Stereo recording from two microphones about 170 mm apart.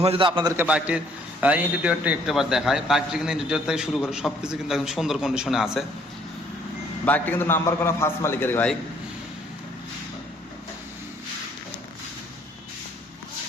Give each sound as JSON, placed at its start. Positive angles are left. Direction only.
{"t": 0.0, "sound": "a man's voice", "side_deg": -35}
{"t": 0.5, "sound": "a man's voice", "side_deg": -10}
{"t": 7.0, "sound": "a man's voice", "side_deg": 10}